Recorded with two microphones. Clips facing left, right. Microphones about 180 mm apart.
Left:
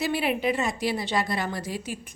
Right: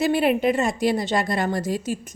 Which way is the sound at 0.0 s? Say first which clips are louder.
Right 6 dB; 50° right (ahead or behind).